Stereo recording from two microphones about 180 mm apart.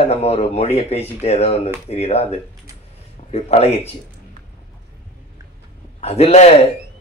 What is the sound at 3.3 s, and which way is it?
Speech, 35° left (ahead or behind).